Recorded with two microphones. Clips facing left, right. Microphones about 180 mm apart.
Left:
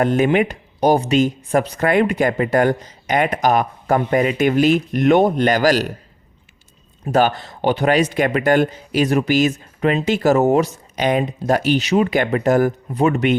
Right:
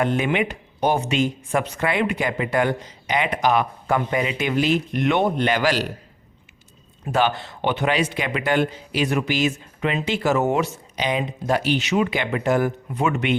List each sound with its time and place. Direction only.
0.0 s speech: 40° left (ahead or behind)
7.1 s speech: 40° left (ahead or behind)